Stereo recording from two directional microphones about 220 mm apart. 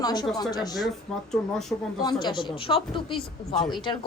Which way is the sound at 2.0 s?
20° left (ahead or behind).